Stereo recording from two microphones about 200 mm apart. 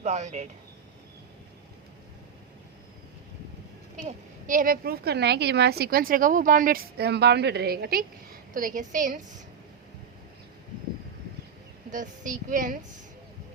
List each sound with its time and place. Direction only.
0.0 s a woman's voice: 35° right (ahead or behind)
4.0 s a woman's voice: 40° right (ahead or behind)
11.9 s a woman's voice: 40° right (ahead or behind)